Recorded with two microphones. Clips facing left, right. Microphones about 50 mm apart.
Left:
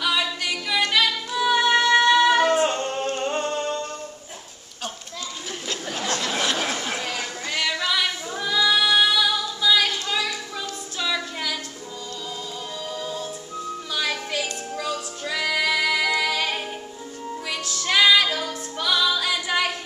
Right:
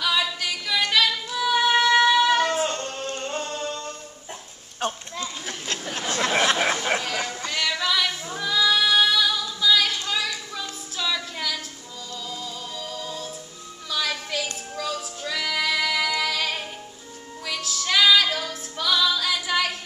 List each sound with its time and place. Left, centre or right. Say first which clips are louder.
0.0 s singing: even; centre
4.8 s goat: right 5 dB; right
6.0 s a sound: right 4 dB; right
7.4 s music: left 2 dB; centre
8.4 s female singing: left 1 dB; centre
11.0 s a sound: left 1 dB; centre
12.9 s music: left 3 dB; centre
17.8 s female singing: left 1 dB; centre